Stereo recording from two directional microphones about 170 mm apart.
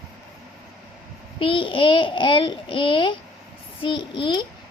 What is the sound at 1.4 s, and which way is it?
A child's voice, 30° left (ahead or behind).